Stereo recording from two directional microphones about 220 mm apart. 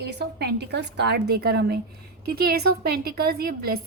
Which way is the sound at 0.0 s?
50° right (ahead or behind).